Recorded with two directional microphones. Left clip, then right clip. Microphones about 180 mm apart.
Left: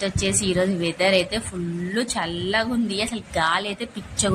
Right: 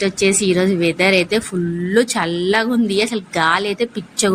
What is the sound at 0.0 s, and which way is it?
Speech, 15° right (ahead or behind).